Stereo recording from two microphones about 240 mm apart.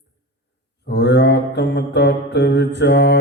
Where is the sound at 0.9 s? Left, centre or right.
Left.